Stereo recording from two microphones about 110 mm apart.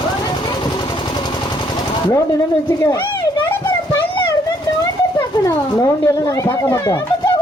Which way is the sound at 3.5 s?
20° left (ahead or behind).